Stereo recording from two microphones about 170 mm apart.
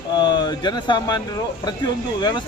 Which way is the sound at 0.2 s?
25° left (ahead or behind).